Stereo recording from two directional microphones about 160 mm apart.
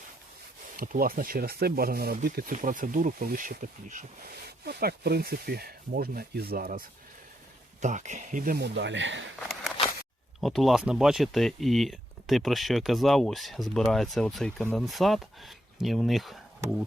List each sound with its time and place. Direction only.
0.8 s speech: 60° right (ahead or behind)
2.3 s speech: 60° right (ahead or behind)
4.3 s speech: 90° right; by 6.8 s 65° right (ahead or behind)
7.8 s speech: 50° right (ahead or behind)
8.5 s speech: 90° right
10.4 s speech: centre (ahead or behind)